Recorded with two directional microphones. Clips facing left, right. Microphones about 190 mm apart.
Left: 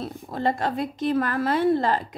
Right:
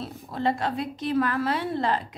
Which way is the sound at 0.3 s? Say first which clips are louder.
Left 1 dB; 45° left (ahead or behind).